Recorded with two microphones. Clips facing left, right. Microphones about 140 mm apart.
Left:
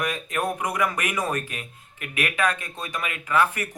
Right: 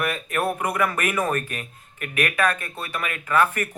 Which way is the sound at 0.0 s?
15° left (ahead or behind).